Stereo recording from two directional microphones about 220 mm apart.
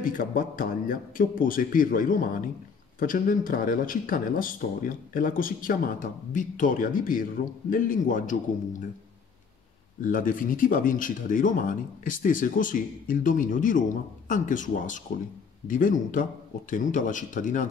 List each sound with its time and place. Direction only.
0.0 s speech: 40° left (ahead or behind)
10.0 s speech: 40° left (ahead or behind)